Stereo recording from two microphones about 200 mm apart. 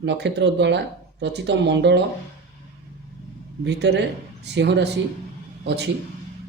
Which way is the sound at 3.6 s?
60° right (ahead or behind).